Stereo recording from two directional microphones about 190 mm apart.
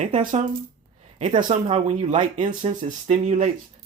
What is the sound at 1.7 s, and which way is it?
Speech, 40° right (ahead or behind).